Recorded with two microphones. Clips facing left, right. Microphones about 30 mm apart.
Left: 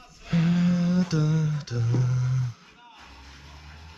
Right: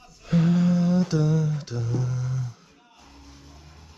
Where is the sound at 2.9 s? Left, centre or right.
Left.